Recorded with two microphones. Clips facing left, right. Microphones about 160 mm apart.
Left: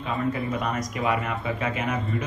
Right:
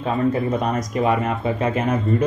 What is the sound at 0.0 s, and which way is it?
Speech, 35° right (ahead or behind).